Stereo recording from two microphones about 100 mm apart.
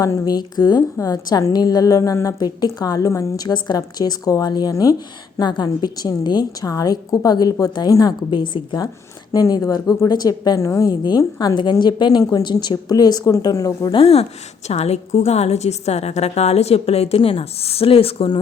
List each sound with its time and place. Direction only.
0.0 s a woman's voice: 40° left (ahead or behind)
0.8 s a woman's voice: 30° left (ahead or behind)
5.4 s a woman's voice: 50° left (ahead or behind)
8.3 s a woman's voice: 55° left (ahead or behind)
9.3 s a woman's voice: 35° left (ahead or behind)
13.9 s a woman's voice: 85° left